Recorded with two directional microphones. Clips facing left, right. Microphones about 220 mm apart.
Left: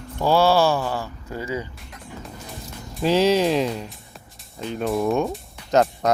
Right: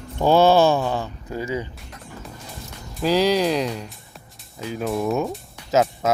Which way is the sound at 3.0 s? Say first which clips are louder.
Left 1 dB; centre (ahead or behind).